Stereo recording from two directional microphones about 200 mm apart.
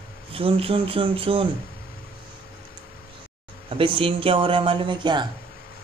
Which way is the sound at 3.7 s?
25° right (ahead or behind).